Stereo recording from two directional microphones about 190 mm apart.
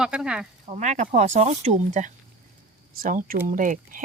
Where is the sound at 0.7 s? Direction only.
40° right (ahead or behind).